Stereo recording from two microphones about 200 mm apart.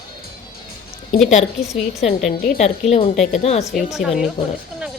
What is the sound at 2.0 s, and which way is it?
A woman's voice, 35° left (ahead or behind).